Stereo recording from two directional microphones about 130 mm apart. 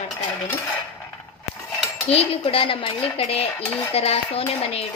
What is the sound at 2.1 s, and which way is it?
Dishes, 50° left (ahead or behind).